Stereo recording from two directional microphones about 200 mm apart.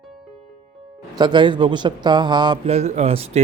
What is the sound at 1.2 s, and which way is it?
A man's voice, 20° right (ahead or behind).